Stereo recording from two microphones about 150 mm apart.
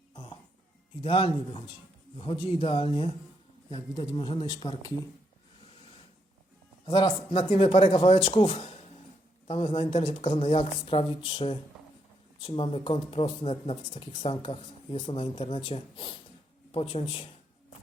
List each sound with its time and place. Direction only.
0.1 s music: 35° left (ahead or behind)
1.0 s speech: 35° left (ahead or behind)
6.8 s speech: 30° left (ahead or behind)